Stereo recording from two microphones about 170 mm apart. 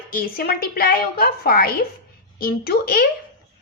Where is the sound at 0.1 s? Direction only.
60° left (ahead or behind).